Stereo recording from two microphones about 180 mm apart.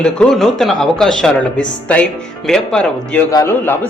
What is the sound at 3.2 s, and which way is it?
Speech, 15° left (ahead or behind).